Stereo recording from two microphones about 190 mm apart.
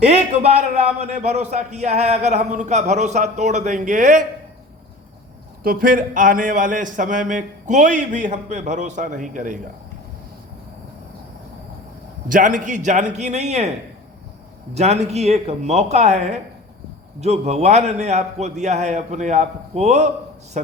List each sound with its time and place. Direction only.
0.0 s a man's voice: 35° right (ahead or behind)
5.6 s a man's voice: 45° right (ahead or behind)
12.3 s a man's voice: 45° right (ahead or behind)
14.7 s a man's voice: 35° right (ahead or behind)